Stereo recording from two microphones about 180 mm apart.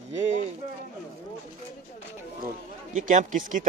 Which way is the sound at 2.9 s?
45° right (ahead or behind).